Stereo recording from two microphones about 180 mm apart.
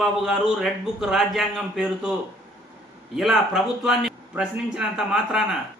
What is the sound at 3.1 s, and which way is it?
A man's voice, centre (ahead or behind).